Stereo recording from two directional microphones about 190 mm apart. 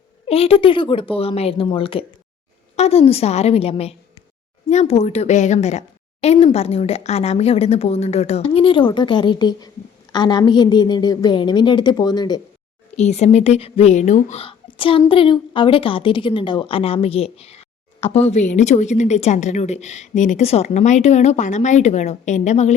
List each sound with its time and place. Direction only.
0.3 s a woman's voice: 30° left (ahead or behind)
13.0 s a woman's voice: 35° left (ahead or behind)